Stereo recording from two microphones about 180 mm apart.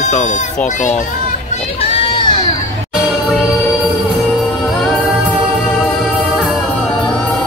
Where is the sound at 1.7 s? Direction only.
30° left (ahead or behind).